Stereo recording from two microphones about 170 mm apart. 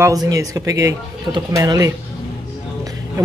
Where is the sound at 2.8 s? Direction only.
20° right (ahead or behind).